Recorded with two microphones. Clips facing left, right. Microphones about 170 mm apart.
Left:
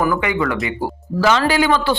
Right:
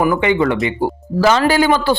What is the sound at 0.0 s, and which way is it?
Speech, 25° right (ahead or behind).